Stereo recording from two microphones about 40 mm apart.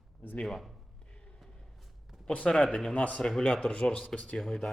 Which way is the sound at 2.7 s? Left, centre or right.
Left.